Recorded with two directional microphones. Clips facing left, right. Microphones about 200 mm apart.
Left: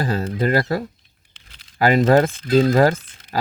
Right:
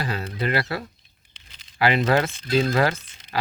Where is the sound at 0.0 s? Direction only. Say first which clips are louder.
Left 6 dB; 40° left (ahead or behind).